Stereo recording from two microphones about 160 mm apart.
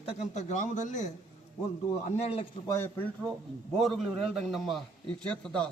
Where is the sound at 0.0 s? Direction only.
50° left (ahead or behind).